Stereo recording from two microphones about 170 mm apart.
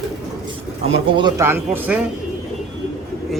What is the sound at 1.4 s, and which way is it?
Speech, 10° right (ahead or behind).